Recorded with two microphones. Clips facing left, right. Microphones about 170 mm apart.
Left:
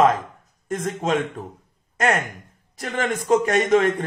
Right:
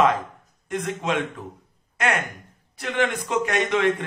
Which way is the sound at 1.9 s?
40° left (ahead or behind).